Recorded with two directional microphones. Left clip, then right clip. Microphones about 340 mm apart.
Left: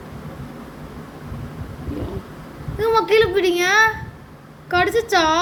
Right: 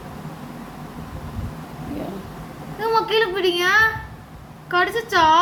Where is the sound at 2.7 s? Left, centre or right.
Centre.